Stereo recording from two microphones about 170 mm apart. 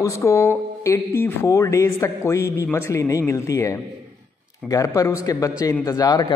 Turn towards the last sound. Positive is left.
turn(degrees=25)  # may be behind; listen again after turning